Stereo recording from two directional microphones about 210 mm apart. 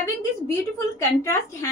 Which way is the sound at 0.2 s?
10° left (ahead or behind).